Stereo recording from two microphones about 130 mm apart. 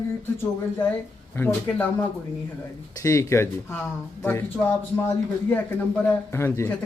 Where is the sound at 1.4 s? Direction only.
15° left (ahead or behind).